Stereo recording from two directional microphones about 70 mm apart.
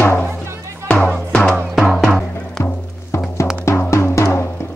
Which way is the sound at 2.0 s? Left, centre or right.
Centre.